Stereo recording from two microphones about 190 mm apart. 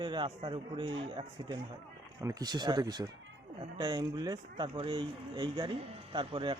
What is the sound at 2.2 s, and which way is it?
A man's voice, 20° right (ahead or behind).